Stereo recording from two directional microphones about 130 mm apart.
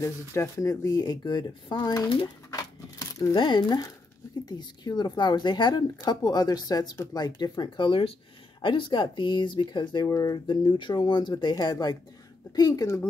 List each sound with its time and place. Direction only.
0.0 s speech: 25° left (ahead or behind)
2.5 s a sound: 25° left (ahead or behind)
3.3 s speech: 35° left (ahead or behind)